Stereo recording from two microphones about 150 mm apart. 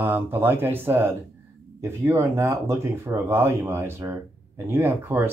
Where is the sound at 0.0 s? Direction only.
15° right (ahead or behind).